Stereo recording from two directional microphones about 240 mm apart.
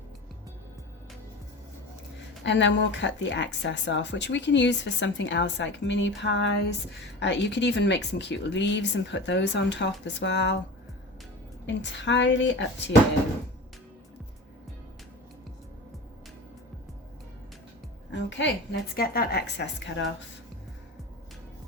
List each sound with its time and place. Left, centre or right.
2.4 s speech: left
11.6 s speech: left
18.1 s speech: left